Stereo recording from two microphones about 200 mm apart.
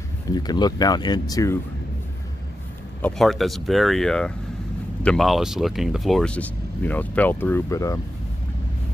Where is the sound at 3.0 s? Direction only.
Centre (ahead or behind); by 7.9 s 15° left (ahead or behind).